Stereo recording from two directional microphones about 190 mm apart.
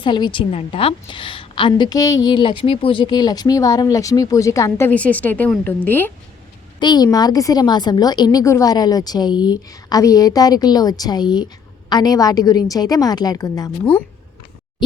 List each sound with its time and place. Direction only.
0.0 s a woman's voice: 25° left (ahead or behind)
6.7 s a woman's voice: 20° left (ahead or behind)